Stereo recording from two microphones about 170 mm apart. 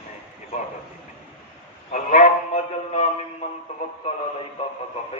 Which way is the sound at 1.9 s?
50° left (ahead or behind).